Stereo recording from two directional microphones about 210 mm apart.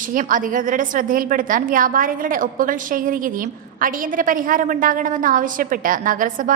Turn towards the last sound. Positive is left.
turn(degrees=-40)  # may be behind; listen again after turning